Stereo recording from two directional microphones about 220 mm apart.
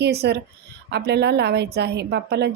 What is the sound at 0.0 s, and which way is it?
A woman's voice, 50° right (ahead or behind).